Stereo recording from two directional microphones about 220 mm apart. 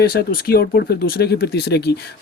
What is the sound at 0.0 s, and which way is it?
Speech, 45° left (ahead or behind).